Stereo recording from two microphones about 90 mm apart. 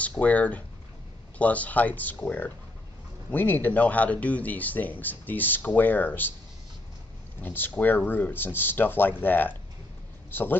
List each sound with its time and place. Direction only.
0.0 s speech: 15° left (ahead or behind)
7.4 s speech: 20° left (ahead or behind)